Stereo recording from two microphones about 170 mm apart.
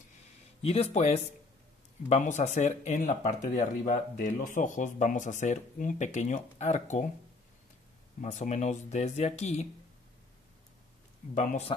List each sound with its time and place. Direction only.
0.6 s speech: 35° left (ahead or behind)
8.2 s speech: 45° left (ahead or behind)
11.3 s speech: 40° left (ahead or behind)